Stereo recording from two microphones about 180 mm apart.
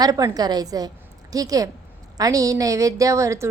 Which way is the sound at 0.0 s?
20° right (ahead or behind).